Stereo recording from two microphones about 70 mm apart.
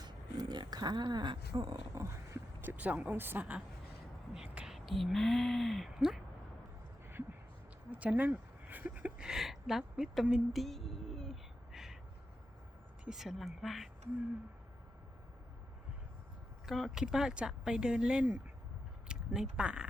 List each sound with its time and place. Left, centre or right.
0.0 s a sound: right
2.0 s roaring cats: right
2.6 s speech: right
4.6 s speech: centre
7.9 s speech: right; by 10.1 s centre
10.5 s a sound: centre
11.7 s crow: centre
13.1 s speech: centre
16.6 s speech: centre